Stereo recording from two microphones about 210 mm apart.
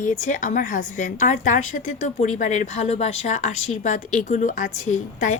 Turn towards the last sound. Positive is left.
turn(degrees=35)  # may be behind; listen again after turning